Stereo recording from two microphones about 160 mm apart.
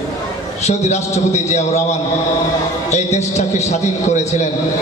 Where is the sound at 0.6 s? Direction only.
45° left (ahead or behind).